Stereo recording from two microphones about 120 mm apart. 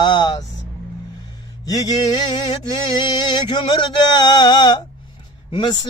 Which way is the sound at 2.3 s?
40° left (ahead or behind).